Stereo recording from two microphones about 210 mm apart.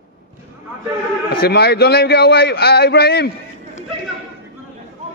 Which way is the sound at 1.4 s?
50° left (ahead or behind).